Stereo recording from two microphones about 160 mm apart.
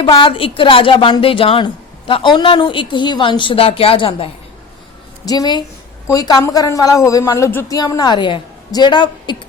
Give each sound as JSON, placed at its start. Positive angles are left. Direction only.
{"t": 0.0, "sound": "speech", "side_deg": 30}
{"t": 5.2, "sound": "a woman's voice", "side_deg": 25}